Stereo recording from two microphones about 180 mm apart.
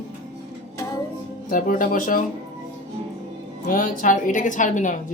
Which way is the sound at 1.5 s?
50° left (ahead or behind).